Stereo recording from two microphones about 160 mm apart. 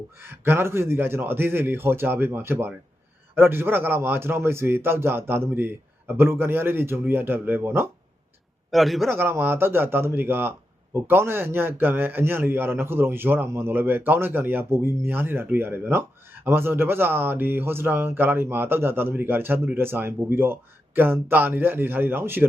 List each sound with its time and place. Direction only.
0.2 s a man's voice: 15° right (ahead or behind)
8.7 s a man's voice: centre (ahead or behind)
9.0 s a man's voice: 15° right (ahead or behind)